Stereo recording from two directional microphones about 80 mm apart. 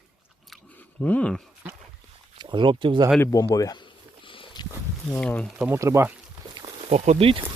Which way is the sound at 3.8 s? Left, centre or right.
Left.